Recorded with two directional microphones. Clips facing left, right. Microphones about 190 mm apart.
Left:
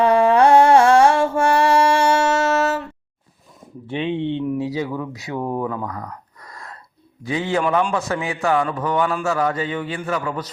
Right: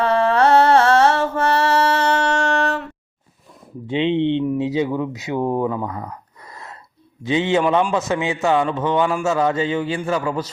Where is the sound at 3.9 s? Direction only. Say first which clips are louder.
Right 5 dB; 20° right (ahead or behind).